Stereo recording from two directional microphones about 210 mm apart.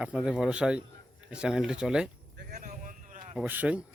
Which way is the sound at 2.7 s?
35° right (ahead or behind).